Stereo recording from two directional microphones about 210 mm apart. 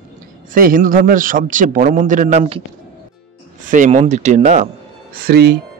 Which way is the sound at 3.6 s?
35° right (ahead or behind).